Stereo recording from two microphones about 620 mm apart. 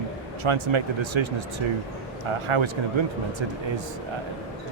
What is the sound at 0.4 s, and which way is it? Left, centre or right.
Speech, right.